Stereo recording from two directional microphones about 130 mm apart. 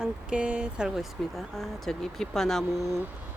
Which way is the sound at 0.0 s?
5° right (ahead or behind).